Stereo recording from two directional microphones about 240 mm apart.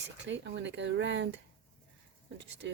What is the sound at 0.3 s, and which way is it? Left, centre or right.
Speech, right.